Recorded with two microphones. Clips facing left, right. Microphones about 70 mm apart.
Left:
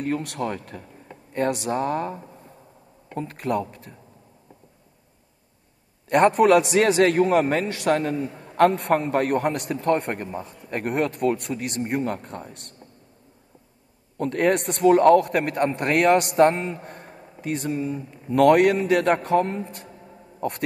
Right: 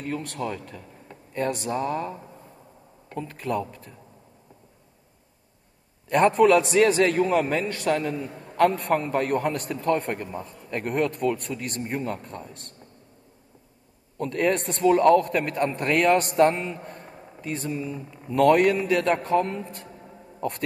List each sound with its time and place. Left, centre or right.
0.0 s a man's voice: left
0.4 s a man's voice: left
3.2 s a man's voice: left
6.0 s a man's voice: left
8.5 s a man's voice: left
14.1 s a man's voice: left
17.4 s a man's voice: left
19.2 s a man's voice: left